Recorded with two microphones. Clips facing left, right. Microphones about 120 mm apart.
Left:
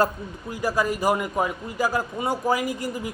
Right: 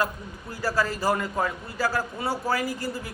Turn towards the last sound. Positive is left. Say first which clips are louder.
# left 3 dB
turn(degrees=15)  # may be behind; listen again after turning